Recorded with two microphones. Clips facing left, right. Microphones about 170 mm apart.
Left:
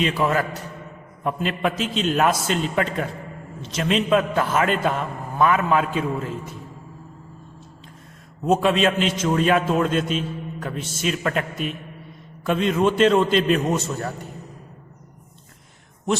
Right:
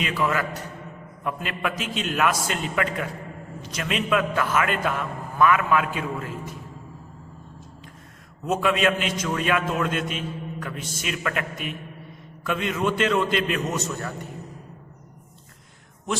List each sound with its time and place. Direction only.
0.0 s a man's voice: 30° left (ahead or behind)
8.4 s a man's voice: 30° left (ahead or behind)